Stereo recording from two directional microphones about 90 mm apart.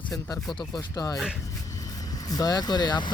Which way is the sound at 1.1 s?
10° right (ahead or behind).